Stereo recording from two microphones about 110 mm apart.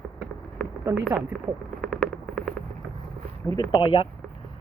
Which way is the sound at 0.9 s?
30° right (ahead or behind).